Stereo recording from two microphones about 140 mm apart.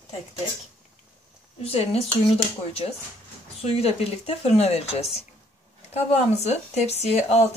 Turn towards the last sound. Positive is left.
turn(degrees=50)  # may be behind; listen again after turning